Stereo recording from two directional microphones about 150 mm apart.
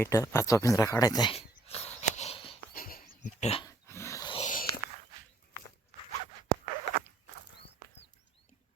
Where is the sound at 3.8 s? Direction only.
15° left (ahead or behind).